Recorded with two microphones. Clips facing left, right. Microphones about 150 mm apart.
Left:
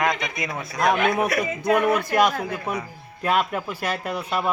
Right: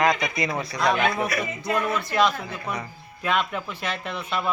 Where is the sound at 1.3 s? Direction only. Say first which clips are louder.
Left 5 dB; 65° left (ahead or behind); by 2.2 s 50° left (ahead or behind).